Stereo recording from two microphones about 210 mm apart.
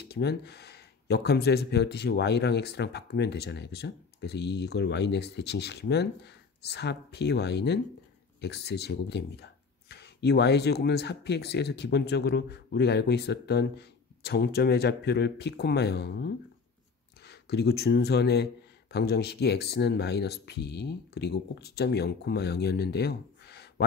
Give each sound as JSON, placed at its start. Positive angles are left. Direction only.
{"t": 0.0, "sound": "speech", "side_deg": 50}